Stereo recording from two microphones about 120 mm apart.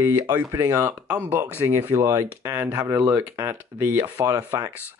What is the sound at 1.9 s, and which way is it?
Speech, 30° right (ahead or behind).